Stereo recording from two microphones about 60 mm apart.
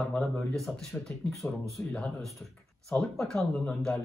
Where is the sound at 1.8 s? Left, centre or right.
Left.